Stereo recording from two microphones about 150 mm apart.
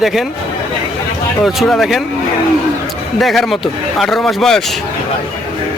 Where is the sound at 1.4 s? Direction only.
Centre (ahead or behind).